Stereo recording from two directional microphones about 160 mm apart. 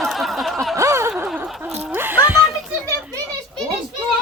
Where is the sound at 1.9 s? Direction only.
10° right (ahead or behind).